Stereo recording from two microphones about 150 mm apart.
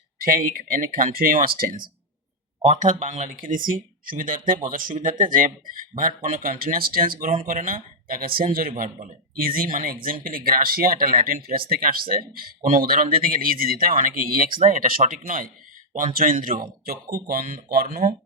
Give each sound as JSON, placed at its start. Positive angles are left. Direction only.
{"t": 0.2, "sound": "speech", "side_deg": -70}
{"t": 2.6, "sound": "speech", "side_deg": -55}